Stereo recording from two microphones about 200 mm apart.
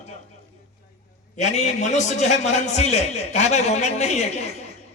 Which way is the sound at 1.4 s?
35° left (ahead or behind).